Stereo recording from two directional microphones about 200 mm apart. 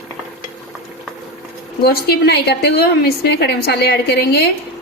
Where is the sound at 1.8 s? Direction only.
50° left (ahead or behind).